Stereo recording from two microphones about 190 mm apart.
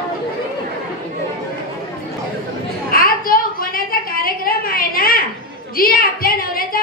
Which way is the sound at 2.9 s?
50° left (ahead or behind).